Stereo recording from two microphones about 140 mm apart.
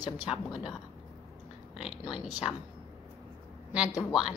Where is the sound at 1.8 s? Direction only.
5° right (ahead or behind).